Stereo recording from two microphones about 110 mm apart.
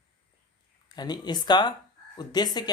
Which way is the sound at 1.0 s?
40° left (ahead or behind).